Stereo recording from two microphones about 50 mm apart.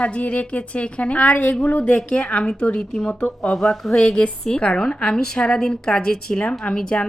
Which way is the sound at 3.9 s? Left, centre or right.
Centre.